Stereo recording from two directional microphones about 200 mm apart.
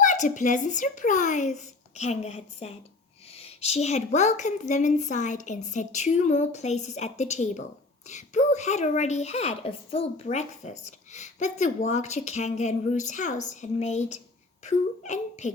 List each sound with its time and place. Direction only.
0.0 s a child's voice: 40° left (ahead or behind)